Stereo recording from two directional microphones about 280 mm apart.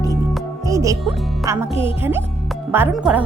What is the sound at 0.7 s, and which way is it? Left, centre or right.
Music, centre.